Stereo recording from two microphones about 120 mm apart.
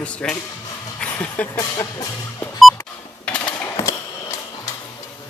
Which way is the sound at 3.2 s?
10° left (ahead or behind).